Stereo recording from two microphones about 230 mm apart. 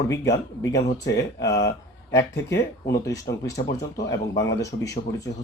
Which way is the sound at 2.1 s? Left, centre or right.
Left.